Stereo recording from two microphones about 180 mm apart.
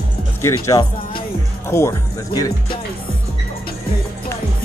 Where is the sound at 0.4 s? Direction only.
15° left (ahead or behind).